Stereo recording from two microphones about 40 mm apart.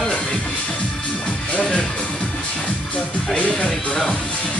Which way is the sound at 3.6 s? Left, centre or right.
Centre.